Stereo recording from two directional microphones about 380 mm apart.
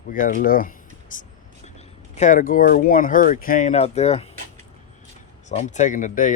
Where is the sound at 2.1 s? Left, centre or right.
Centre.